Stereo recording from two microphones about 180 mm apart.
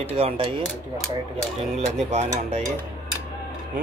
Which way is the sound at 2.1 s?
40° right (ahead or behind).